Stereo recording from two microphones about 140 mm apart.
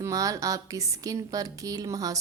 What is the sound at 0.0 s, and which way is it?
Speech, 25° right (ahead or behind).